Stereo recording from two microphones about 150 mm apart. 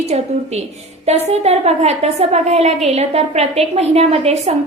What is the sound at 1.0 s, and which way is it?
A woman's voice, 45° right (ahead or behind).